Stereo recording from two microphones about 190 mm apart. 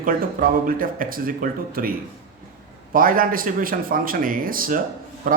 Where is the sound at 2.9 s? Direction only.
45° right (ahead or behind).